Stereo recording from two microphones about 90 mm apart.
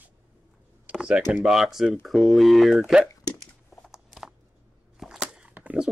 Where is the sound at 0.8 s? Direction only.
10° right (ahead or behind).